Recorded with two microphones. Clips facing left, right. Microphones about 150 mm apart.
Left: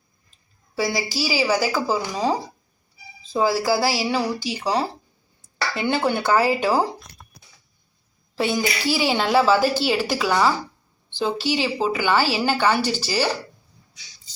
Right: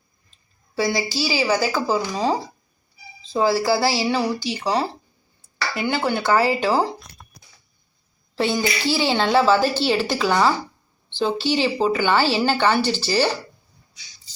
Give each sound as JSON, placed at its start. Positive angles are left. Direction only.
{"t": 0.9, "sound": "speech", "side_deg": 10}
{"t": 3.3, "sound": "speech", "side_deg": 10}
{"t": 5.7, "sound": "speech", "side_deg": 20}
{"t": 8.4, "sound": "speech", "side_deg": 10}